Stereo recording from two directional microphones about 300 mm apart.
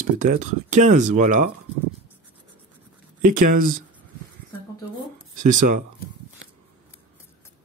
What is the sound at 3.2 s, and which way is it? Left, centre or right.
Speech, right.